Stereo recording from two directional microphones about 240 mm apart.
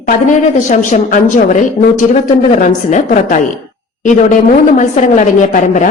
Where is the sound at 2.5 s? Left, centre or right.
Left.